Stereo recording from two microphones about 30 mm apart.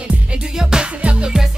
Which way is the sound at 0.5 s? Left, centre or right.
Right.